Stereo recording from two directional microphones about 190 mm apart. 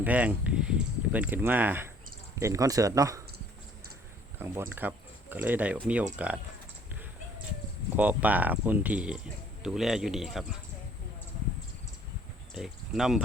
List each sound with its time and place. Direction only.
0.0 s speech: 10° right (ahead or behind)
4.4 s speech: 10° right (ahead or behind)
7.9 s speech: 10° right (ahead or behind)
12.5 s speech: centre (ahead or behind)